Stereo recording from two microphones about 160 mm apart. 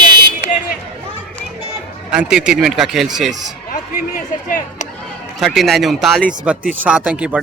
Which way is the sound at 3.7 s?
60° left (ahead or behind).